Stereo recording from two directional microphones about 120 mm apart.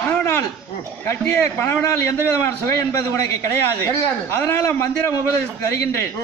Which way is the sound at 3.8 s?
20° left (ahead or behind).